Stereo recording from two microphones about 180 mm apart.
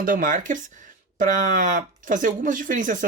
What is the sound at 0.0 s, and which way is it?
Speech, 50° right (ahead or behind).